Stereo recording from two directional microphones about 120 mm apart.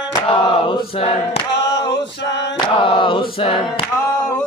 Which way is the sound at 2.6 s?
45° left (ahead or behind).